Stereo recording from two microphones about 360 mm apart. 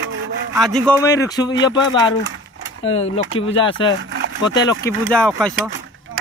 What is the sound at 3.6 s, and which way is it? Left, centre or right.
Speech, centre.